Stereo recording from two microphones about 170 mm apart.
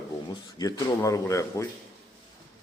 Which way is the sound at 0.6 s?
20° left (ahead or behind).